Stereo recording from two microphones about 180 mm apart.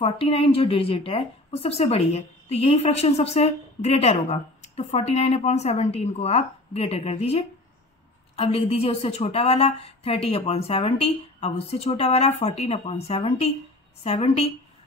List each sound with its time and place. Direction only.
0.0 s speech: 30° left (ahead or behind)